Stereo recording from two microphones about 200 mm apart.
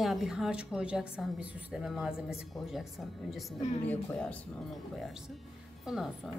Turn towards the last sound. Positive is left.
turn(degrees=0)  # may be behind; listen again after turning